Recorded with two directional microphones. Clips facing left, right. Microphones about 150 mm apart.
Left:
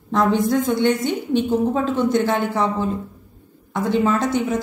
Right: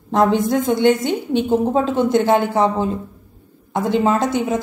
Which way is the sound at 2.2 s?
40° right (ahead or behind).